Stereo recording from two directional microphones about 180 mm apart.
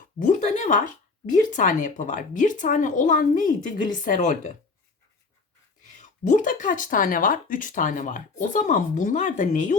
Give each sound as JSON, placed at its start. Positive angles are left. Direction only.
{"t": 0.2, "sound": "speech", "side_deg": 45}
{"t": 6.0, "sound": "speech", "side_deg": 45}